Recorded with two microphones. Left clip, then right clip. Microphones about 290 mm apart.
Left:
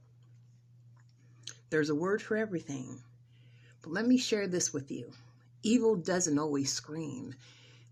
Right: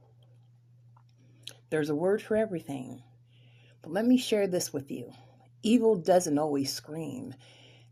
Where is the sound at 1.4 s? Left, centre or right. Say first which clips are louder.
Right 2 dB; centre.